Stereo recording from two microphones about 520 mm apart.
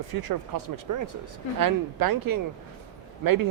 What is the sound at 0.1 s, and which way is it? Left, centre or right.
Speech, right.